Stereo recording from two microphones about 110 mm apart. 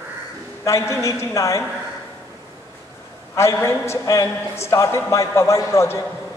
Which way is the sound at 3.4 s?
25° left (ahead or behind).